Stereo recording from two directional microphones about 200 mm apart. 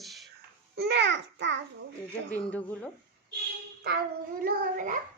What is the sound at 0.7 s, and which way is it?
Speech, 60° right (ahead or behind).